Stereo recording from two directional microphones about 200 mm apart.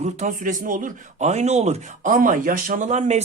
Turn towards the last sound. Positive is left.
turn(degrees=-35)  # may be behind; listen again after turning